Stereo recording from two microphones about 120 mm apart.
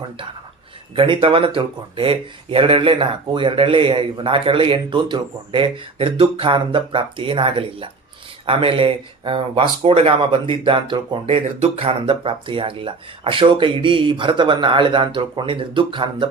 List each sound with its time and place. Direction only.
0.9 s speech: 45° right (ahead or behind)
11.6 s speech: 55° right (ahead or behind)